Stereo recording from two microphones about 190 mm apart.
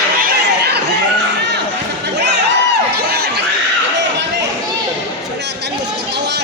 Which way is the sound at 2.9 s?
55° right (ahead or behind).